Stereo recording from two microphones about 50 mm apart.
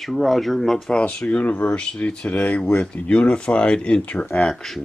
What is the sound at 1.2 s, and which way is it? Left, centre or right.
Speech, left.